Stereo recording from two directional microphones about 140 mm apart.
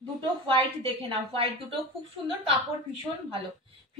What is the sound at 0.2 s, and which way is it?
A woman's voice, 40° right (ahead or behind).